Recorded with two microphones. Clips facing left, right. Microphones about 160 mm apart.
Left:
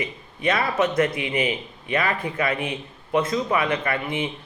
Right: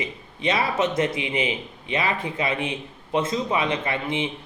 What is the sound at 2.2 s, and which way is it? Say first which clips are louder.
Speech: left 1 dB; 25° right (ahead or behind).